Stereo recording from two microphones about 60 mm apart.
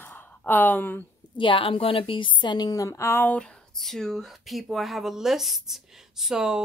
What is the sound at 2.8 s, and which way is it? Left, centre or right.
Speech, left.